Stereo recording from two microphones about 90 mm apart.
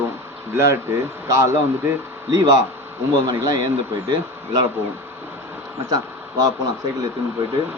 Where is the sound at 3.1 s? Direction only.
45° right (ahead or behind).